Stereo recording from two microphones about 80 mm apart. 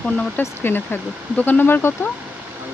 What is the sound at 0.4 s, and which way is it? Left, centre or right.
Speech, left.